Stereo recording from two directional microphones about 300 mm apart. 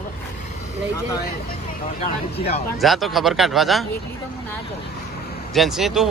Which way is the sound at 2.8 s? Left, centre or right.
Centre.